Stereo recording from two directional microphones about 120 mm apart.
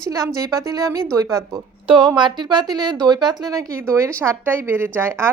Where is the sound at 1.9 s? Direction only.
40° right (ahead or behind).